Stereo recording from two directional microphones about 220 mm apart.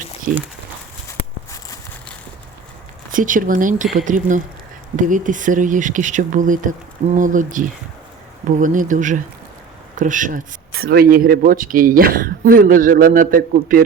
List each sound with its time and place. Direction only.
0.3 s speech: 35° right (ahead or behind)
3.1 s speech: 35° right (ahead or behind)